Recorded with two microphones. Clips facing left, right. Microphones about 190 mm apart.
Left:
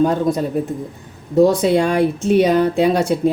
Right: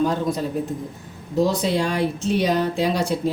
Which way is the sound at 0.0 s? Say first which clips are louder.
Left 5 dB; 50° left (ahead or behind).